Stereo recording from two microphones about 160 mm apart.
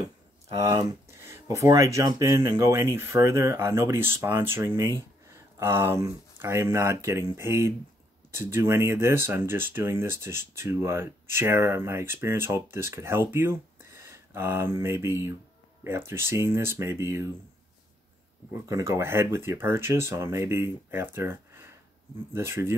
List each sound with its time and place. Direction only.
0.6 s speech: 20° right (ahead or behind)
18.5 s speech: 20° right (ahead or behind)